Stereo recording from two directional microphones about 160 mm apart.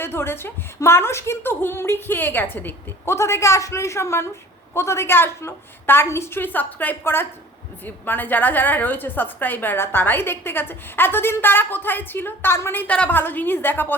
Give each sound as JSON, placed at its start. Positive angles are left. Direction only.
{"t": 0.0, "sound": "a woman's voice", "side_deg": 15}